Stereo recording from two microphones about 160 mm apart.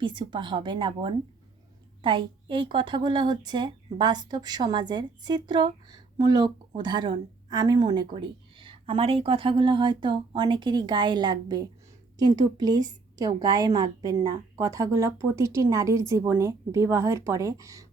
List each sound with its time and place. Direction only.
0.0 s a woman's voice: 30° right (ahead or behind)